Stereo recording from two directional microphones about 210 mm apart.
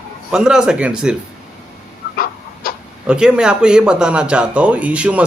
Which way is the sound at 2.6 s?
45° left (ahead or behind).